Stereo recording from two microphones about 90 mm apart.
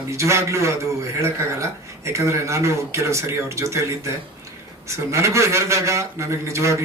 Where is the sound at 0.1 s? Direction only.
35° right (ahead or behind).